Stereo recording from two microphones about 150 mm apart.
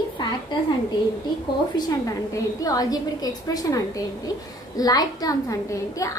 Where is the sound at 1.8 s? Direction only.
20° left (ahead or behind).